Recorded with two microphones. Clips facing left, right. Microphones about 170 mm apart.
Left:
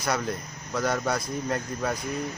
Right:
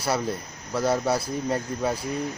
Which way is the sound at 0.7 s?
30° right (ahead or behind).